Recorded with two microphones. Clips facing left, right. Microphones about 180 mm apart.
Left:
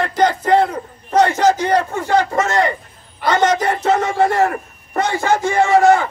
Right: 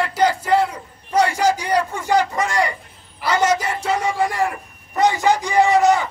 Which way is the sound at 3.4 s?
10° right (ahead or behind).